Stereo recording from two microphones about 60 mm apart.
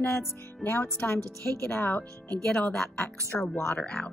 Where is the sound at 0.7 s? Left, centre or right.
Left.